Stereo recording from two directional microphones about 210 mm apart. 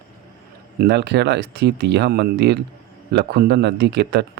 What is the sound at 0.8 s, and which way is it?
Speech, 55° right (ahead or behind).